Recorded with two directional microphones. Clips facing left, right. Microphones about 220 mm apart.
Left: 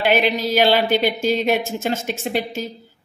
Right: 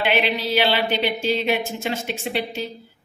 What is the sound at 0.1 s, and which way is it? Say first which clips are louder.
A woman's voice: left 3 dB; 45° left (ahead or behind).